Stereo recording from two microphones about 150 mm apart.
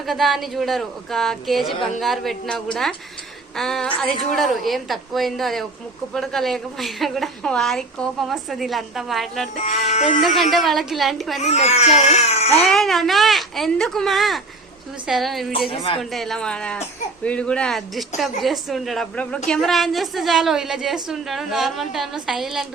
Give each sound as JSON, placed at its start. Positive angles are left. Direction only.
{"t": 0.0, "sound": "a woman's voice", "side_deg": 0}
{"t": 9.6, "sound": "speech", "side_deg": 45}
{"t": 10.2, "sound": "a woman's voice", "side_deg": 0}
{"t": 11.3, "sound": "speech", "side_deg": 50}
{"t": 12.6, "sound": "a woman's voice", "side_deg": 0}